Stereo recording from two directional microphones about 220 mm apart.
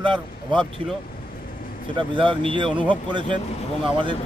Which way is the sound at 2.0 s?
20° right (ahead or behind).